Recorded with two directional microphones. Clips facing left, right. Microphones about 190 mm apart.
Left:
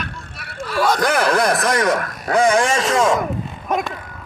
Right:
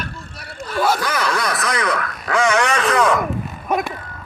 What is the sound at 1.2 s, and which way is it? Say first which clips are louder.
A man's voice: left 5 dB; 50° left (ahead or behind).